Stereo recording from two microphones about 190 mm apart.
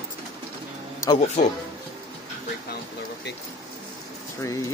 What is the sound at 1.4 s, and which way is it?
Speech, 40° left (ahead or behind).